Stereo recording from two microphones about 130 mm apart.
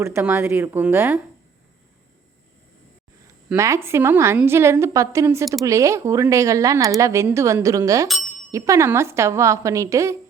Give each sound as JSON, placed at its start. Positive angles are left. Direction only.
{"t": 0.0, "sound": "a woman's voice", "side_deg": -20}
{"t": 3.5, "sound": "speech", "side_deg": -20}